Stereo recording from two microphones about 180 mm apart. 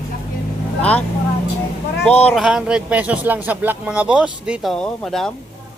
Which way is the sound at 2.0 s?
5° left (ahead or behind).